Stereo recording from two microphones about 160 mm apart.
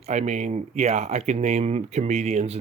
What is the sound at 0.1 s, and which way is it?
Speech, 45° right (ahead or behind).